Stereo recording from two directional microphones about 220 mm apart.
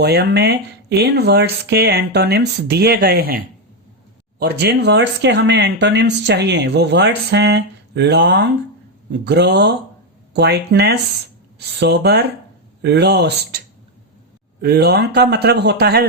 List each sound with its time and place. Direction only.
0.0 s speech: 50° right (ahead or behind)